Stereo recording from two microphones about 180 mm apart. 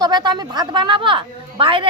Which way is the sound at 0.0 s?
25° right (ahead or behind).